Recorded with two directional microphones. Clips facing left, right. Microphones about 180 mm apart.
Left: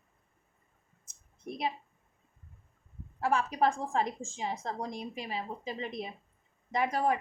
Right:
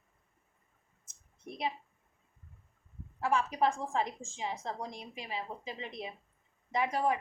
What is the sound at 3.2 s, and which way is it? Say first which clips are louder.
A woman's voice: left 2 dB; 40° left (ahead or behind).